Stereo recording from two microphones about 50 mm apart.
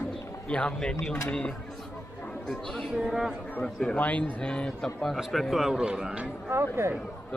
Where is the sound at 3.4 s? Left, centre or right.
Left.